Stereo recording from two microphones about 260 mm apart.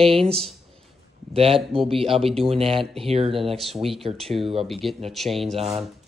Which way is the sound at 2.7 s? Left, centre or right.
Centre.